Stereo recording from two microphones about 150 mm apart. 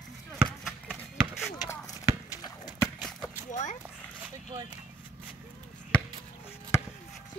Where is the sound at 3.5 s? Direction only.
50° left (ahead or behind).